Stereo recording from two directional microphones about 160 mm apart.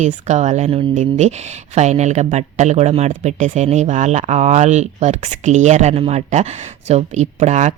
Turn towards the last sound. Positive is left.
turn(degrees=-50)  # may be behind; listen again after turning